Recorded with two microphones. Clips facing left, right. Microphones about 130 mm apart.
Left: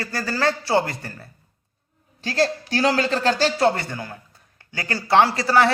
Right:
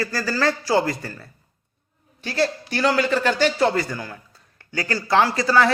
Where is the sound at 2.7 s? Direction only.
35° left (ahead or behind).